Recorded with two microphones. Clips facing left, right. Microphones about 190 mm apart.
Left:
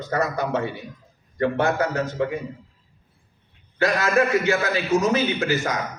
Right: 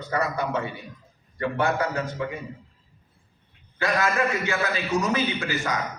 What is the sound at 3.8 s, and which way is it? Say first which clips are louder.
A man's voice: left 4 dB; 40° left (ahead or behind).